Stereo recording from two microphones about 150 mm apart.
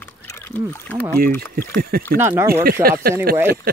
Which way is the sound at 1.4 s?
90° right.